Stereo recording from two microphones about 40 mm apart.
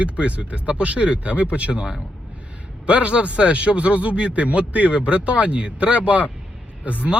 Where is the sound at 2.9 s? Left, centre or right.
Right.